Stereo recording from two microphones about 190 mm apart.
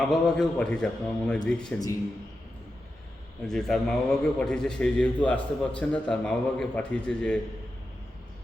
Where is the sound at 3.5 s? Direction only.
Centre (ahead or behind).